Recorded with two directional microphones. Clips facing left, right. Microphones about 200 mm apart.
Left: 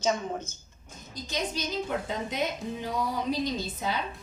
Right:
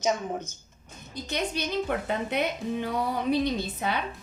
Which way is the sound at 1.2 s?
65° right (ahead or behind).